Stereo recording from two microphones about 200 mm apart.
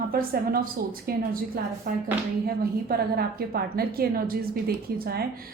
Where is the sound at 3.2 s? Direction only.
50° right (ahead or behind).